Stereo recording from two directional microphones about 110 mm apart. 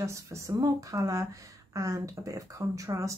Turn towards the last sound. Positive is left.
turn(degrees=-30)  # may be behind; listen again after turning